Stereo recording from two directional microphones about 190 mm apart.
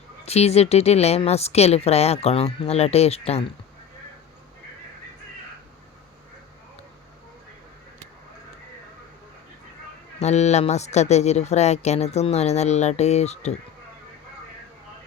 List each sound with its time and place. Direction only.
0.3 s a woman's voice: 35° left (ahead or behind)
10.2 s a woman's voice: 35° left (ahead or behind)